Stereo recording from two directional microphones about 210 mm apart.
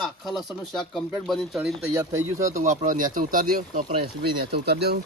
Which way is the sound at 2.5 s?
40° right (ahead or behind).